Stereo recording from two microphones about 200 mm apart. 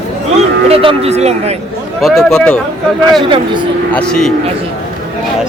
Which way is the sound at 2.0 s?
Centre (ahead or behind).